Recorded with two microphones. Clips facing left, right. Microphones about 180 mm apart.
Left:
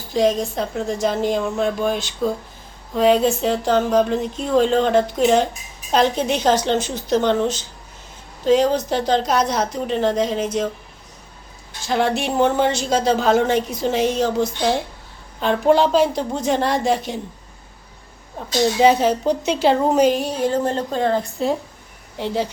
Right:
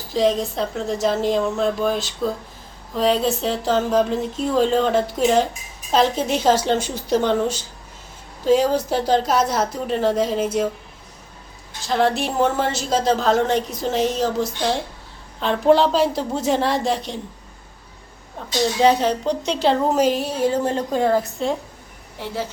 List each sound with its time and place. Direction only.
0.1 s a woman's voice: centre (ahead or behind)
11.9 s a woman's voice: centre (ahead or behind)
18.8 s a woman's voice: 5° left (ahead or behind)
22.2 s a woman's voice: 15° left (ahead or behind)